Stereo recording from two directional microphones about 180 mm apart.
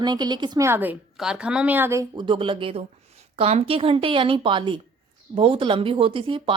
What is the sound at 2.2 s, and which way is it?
Speech, 30° right (ahead or behind).